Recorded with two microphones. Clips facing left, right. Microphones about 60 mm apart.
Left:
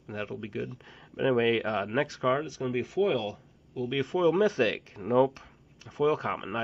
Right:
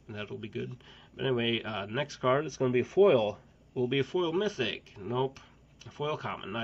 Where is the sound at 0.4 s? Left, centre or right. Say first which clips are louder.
Left 3 dB; left.